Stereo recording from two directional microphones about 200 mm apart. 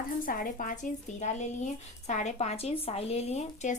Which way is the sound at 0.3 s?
45° left (ahead or behind).